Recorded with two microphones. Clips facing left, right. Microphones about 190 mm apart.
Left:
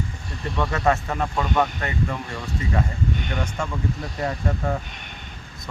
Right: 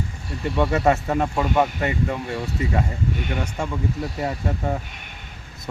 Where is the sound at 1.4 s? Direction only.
10° right (ahead or behind).